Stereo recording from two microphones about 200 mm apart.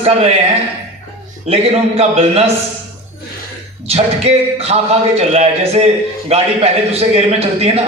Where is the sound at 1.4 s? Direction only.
30° right (ahead or behind).